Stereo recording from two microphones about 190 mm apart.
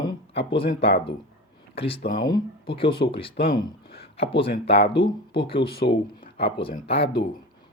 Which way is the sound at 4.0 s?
30° left (ahead or behind).